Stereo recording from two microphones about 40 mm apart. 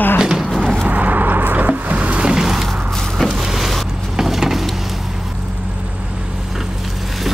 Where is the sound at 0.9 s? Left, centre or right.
Right.